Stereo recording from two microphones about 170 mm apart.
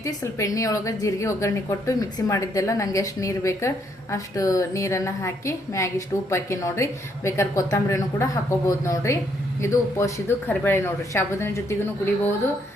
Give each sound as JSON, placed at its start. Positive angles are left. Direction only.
{"t": 0.0, "sound": "a woman's voice", "side_deg": 20}